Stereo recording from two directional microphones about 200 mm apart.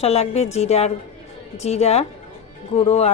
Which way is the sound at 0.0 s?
30° left (ahead or behind).